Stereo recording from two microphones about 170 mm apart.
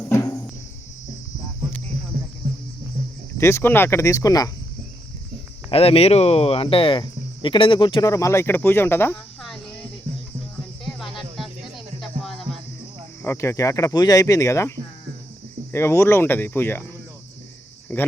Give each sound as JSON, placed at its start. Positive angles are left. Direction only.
{"t": 0.0, "sound": "music", "side_deg": 15}
{"t": 3.3, "sound": "speech", "side_deg": 15}
{"t": 5.7, "sound": "speech", "side_deg": 35}
{"t": 8.1, "sound": "speech", "side_deg": 15}
{"t": 9.4, "sound": "cricket", "side_deg": 0}
{"t": 10.9, "sound": "music", "side_deg": 0}
{"t": 13.2, "sound": "speech", "side_deg": 15}
{"t": 15.7, "sound": "speech", "side_deg": 15}
{"t": 17.9, "sound": "speech", "side_deg": 10}